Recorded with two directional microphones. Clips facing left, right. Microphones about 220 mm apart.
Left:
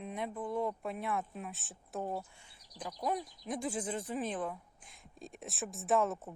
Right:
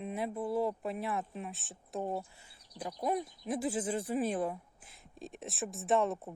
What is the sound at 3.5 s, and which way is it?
Speech, 5° right (ahead or behind).